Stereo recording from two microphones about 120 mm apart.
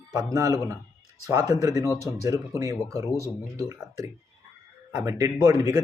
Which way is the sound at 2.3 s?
25° right (ahead or behind).